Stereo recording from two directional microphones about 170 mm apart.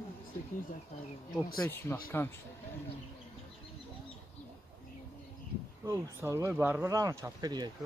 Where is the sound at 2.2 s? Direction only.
15° left (ahead or behind).